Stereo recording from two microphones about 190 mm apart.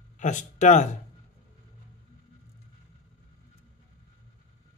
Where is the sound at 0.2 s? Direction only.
40° left (ahead or behind).